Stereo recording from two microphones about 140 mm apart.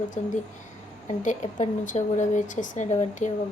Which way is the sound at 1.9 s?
60° left (ahead or behind).